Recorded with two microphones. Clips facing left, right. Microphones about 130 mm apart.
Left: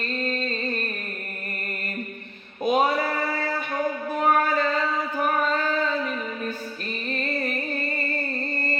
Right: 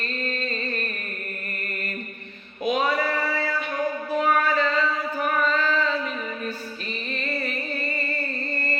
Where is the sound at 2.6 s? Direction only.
45° left (ahead or behind).